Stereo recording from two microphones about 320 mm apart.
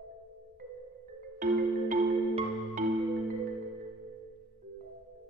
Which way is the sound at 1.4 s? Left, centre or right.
Right.